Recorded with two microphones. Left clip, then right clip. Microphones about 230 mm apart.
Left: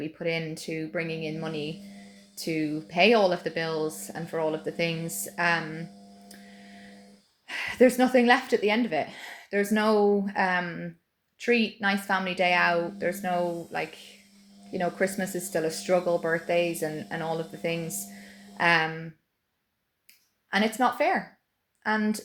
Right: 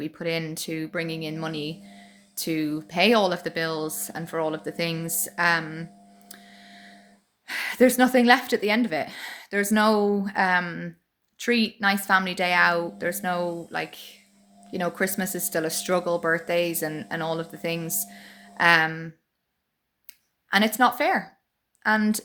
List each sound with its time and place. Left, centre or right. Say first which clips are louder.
0.0 s speech: right 1 dB; centre
7.4 s speech: right 1 dB; centre
20.1 s a sound: right 6 dB; centre
21.8 s speech: right 5 dB; centre